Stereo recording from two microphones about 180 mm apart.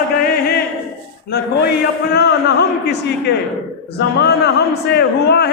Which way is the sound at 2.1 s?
65° left (ahead or behind).